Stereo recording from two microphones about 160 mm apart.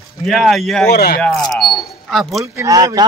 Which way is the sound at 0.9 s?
75° left (ahead or behind).